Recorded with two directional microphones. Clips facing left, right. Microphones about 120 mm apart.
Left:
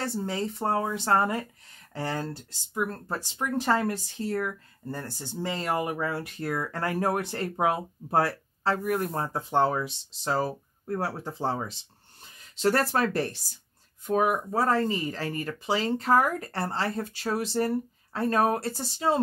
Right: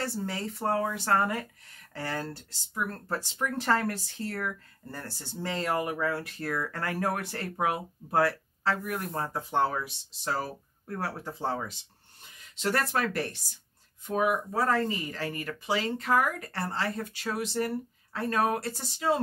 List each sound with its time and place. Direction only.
0.0 s speech: 20° left (ahead or behind)
14.0 s speech: 45° left (ahead or behind)
14.5 s speech: 30° left (ahead or behind)